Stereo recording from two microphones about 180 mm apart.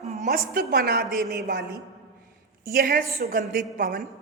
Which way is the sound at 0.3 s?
55° right (ahead or behind).